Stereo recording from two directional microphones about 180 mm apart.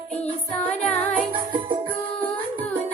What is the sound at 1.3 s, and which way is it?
Music, 30° right (ahead or behind).